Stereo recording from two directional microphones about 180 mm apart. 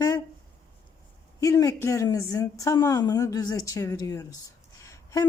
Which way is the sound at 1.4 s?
20° left (ahead or behind).